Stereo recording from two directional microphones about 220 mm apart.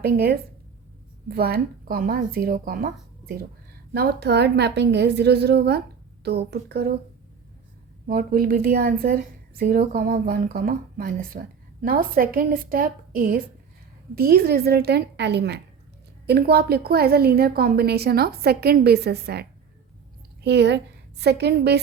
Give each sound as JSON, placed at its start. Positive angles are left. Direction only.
{"t": 0.0, "sound": "a woman's voice", "side_deg": -45}
{"t": 8.0, "sound": "a woman's voice", "side_deg": -40}